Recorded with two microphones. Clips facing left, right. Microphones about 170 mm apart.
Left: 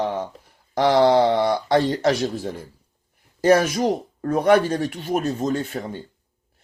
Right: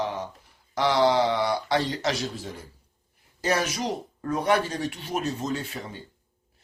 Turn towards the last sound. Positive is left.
turn(degrees=50)  # may be behind; listen again after turning